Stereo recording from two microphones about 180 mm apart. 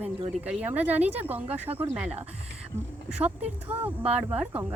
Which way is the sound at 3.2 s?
10° right (ahead or behind).